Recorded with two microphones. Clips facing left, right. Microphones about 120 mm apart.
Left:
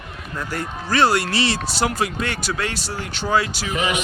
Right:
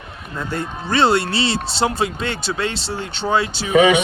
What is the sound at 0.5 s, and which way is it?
Speech, 25° right (ahead or behind).